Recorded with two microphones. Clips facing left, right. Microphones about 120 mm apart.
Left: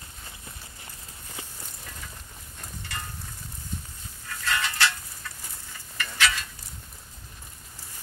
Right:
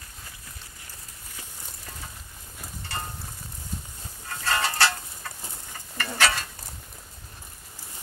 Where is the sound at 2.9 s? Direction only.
30° right (ahead or behind).